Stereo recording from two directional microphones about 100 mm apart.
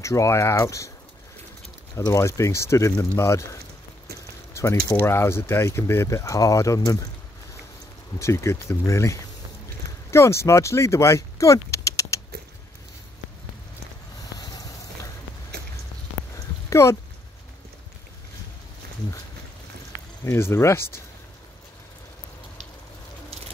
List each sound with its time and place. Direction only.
0.0 s speech: 30° left (ahead or behind)
2.0 s speech: 30° left (ahead or behind)
4.6 s speech: 30° left (ahead or behind)
8.2 s speech: 30° left (ahead or behind)
16.6 s a sound: 30° left (ahead or behind)
20.2 s speech: 25° left (ahead or behind)